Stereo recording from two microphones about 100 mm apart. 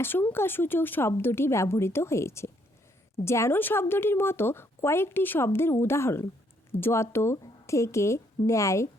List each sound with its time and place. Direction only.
0.0 s a woman's voice: 20° left (ahead or behind)